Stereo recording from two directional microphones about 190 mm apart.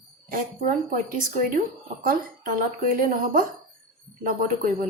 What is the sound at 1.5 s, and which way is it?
Speech, 45° right (ahead or behind).